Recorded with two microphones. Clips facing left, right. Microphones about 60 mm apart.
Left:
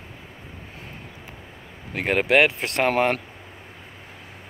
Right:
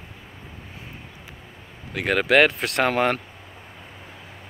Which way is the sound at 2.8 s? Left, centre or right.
Left.